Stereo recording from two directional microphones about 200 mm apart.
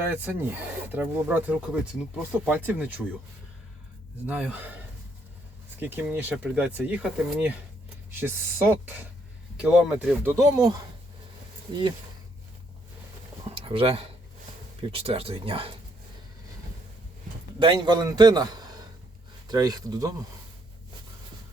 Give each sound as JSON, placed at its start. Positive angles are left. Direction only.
{"t": 0.0, "sound": "speech", "side_deg": -10}
{"t": 4.3, "sound": "speech", "side_deg": -5}
{"t": 5.8, "sound": "speech", "side_deg": -10}
{"t": 10.3, "sound": "a man's voice", "side_deg": -15}
{"t": 13.5, "sound": "a man's voice", "side_deg": -30}
{"t": 17.6, "sound": "a man's voice", "side_deg": -20}